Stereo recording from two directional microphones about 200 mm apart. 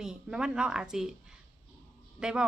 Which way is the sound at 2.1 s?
5° right (ahead or behind).